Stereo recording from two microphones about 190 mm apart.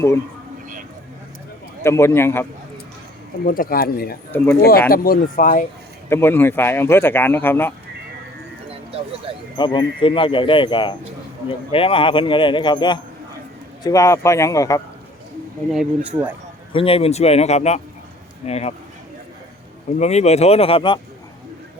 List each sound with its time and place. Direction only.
1.8 s speech: 15° left (ahead or behind)
3.4 s a man's voice: 50° left (ahead or behind)
4.3 s speech: 10° left (ahead or behind)
4.9 s a man's voice: 50° left (ahead or behind)
6.1 s speech: 10° left (ahead or behind)
9.6 s speech: 25° left (ahead or behind)
15.7 s speech: 5° right (ahead or behind)
16.7 s speech: 30° left (ahead or behind)
20.0 s speech: 35° left (ahead or behind)